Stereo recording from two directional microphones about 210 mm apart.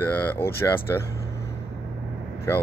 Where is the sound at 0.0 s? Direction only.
10° left (ahead or behind).